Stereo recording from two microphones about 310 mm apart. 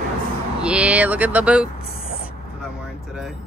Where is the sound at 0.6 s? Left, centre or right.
Centre.